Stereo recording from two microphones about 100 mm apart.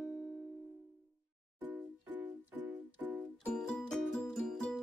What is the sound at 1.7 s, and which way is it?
Music, 20° right (ahead or behind).